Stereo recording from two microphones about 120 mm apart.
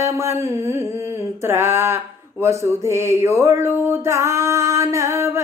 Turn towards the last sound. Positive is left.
turn(degrees=-20)  # may be behind; listen again after turning